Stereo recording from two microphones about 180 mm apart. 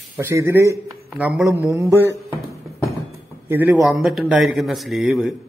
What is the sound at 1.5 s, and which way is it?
Speech, 15° right (ahead or behind).